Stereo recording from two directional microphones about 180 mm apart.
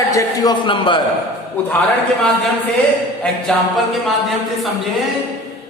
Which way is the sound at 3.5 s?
5° left (ahead or behind).